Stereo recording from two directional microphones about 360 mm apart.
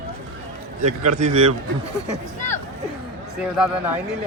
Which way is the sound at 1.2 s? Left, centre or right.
Centre.